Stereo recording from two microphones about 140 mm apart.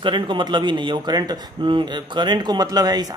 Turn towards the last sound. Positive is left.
turn(degrees=-30)  # may be behind; listen again after turning